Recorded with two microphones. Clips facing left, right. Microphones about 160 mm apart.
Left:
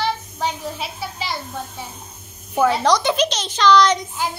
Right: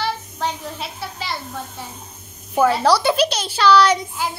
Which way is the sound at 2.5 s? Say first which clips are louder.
Right 1 dB; 5° right (ahead or behind).